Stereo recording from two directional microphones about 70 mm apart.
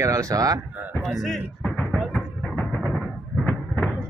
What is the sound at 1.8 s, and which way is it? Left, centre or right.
Music, centre.